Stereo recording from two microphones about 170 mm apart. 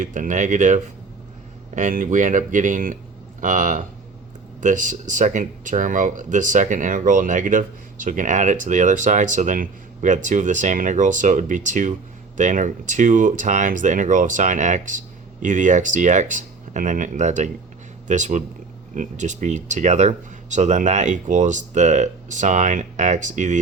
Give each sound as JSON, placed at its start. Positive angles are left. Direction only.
{"t": 0.0, "sound": "speech", "side_deg": -50}